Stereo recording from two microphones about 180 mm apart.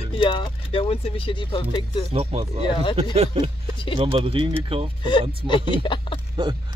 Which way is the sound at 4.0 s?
30° right (ahead or behind).